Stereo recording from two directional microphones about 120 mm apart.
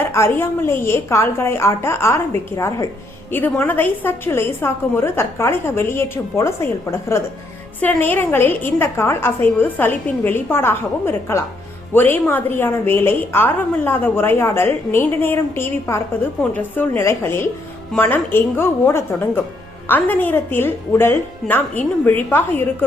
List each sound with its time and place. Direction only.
0.1 s a woman's voice: 20° left (ahead or behind)
3.3 s a woman's voice: 15° left (ahead or behind)